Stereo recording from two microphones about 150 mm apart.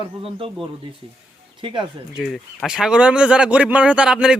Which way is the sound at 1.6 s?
35° right (ahead or behind).